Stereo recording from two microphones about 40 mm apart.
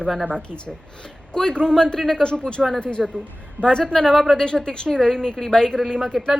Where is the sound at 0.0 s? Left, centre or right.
Centre.